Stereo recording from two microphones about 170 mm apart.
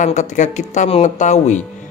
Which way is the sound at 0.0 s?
45° left (ahead or behind).